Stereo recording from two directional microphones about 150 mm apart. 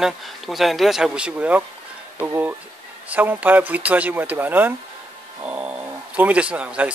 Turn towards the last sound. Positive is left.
turn(degrees=-10)  # may be behind; listen again after turning